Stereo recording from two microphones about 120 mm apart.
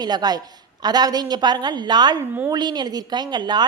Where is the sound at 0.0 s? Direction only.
35° right (ahead or behind).